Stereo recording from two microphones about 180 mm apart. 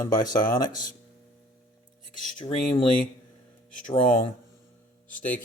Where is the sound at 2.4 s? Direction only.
30° left (ahead or behind).